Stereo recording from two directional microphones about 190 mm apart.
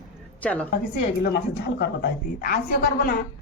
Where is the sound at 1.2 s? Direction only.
60° left (ahead or behind).